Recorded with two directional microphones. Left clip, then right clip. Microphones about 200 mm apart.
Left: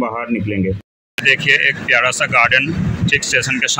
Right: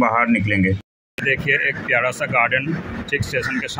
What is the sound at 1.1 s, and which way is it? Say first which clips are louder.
Speech: left 6 dB; centre (ahead or behind).